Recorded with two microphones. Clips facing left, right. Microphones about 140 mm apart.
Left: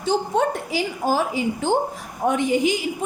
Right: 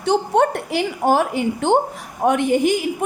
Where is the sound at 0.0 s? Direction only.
65° right (ahead or behind).